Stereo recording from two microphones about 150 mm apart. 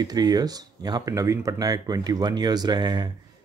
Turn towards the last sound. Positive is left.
turn(degrees=-30)  # may be behind; listen again after turning